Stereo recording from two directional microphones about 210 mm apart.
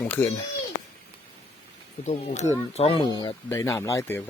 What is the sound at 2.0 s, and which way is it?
Speech, 30° left (ahead or behind).